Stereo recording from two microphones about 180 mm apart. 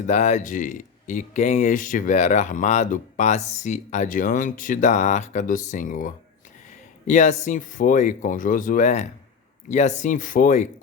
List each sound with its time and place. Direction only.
0.1 s speech: 40° left (ahead or behind)